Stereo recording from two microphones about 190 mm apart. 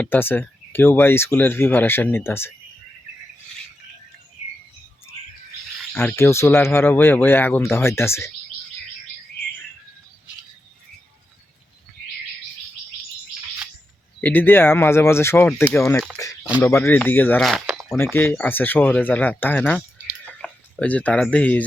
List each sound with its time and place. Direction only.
0.0 s speech: 10° left (ahead or behind)
5.9 s speech: 10° left (ahead or behind)
14.2 s speech: 10° left (ahead or behind)
17.8 s speech: 10° left (ahead or behind)